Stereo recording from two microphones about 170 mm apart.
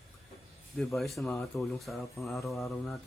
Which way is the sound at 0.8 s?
Centre (ahead or behind).